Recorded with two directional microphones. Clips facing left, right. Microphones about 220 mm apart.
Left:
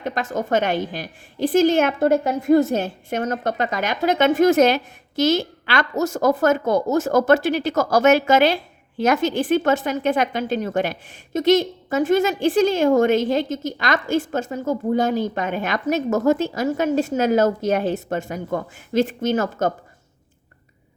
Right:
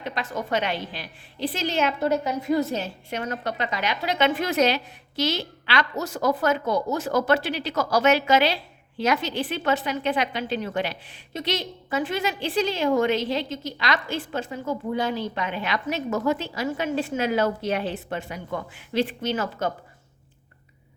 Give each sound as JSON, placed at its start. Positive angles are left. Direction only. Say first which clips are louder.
{"t": 0.0, "sound": "a woman's voice", "louder": "left 5 dB", "side_deg": 45}